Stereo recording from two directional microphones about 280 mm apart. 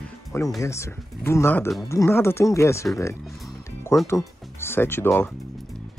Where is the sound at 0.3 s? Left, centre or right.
Centre.